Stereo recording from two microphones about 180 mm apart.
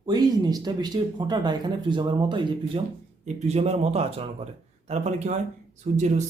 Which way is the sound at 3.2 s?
35° right (ahead or behind).